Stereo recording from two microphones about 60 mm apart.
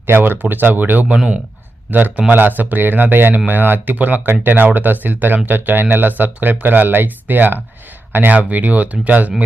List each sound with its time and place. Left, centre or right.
0.0 s speech: right
1.0 s speech: centre
1.9 s speech: right